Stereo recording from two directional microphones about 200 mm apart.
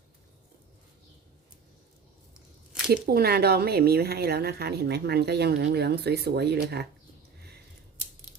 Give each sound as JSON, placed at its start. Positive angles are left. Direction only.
{"t": 2.9, "sound": "speech", "side_deg": -50}